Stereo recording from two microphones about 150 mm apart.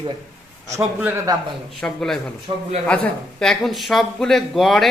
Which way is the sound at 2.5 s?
40° right (ahead or behind).